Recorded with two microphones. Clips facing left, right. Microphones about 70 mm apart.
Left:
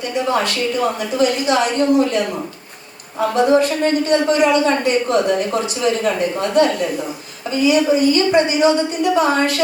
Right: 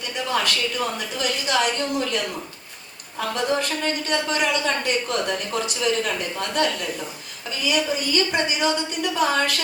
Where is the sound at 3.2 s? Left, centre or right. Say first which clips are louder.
Left 10 dB; left.